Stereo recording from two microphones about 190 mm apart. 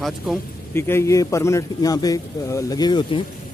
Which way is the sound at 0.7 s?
15° left (ahead or behind).